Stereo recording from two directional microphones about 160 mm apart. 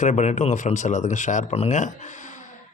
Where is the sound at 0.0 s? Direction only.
45° left (ahead or behind).